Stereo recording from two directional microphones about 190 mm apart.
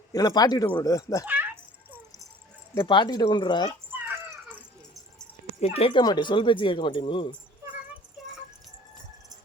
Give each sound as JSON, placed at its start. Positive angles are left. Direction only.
{"t": 0.1, "sound": "speech", "side_deg": 20}
{"t": 1.2, "sound": "rattle", "side_deg": -10}
{"t": 2.7, "sound": "speech", "side_deg": 25}
{"t": 3.9, "sound": "dog", "side_deg": -10}
{"t": 5.5, "sound": "speech", "side_deg": 30}
{"t": 8.2, "sound": "music", "side_deg": 0}